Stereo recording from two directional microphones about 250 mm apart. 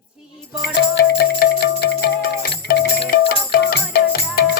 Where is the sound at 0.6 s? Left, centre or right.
Left.